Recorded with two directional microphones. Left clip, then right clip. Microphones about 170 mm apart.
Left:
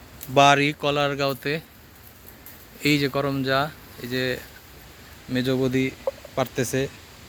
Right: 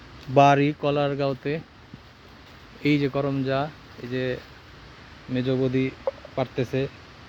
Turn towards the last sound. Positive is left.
turn(degrees=0)  # may be behind; listen again after turning